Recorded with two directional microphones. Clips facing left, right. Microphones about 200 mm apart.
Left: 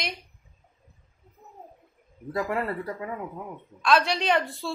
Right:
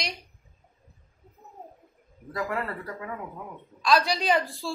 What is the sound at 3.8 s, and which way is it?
Speech, centre (ahead or behind).